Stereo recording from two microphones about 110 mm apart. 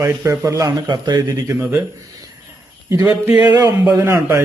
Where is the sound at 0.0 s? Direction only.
30° right (ahead or behind).